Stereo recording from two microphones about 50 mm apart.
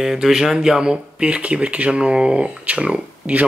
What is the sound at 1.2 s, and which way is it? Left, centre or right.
Speech, right.